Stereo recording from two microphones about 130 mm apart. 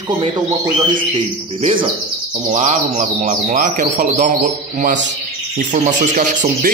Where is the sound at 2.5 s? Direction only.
60° right (ahead or behind).